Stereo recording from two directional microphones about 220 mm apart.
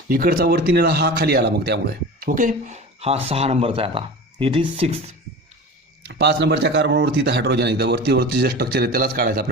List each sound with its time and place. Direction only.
0.1 s speech: 40° right (ahead or behind)
2.2 s speech: 35° right (ahead or behind)
6.1 s speech: 50° right (ahead or behind)